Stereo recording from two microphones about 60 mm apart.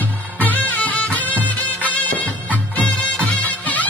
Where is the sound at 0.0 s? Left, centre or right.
Left.